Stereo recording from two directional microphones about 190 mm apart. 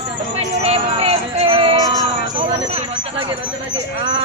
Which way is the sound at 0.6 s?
30° right (ahead or behind).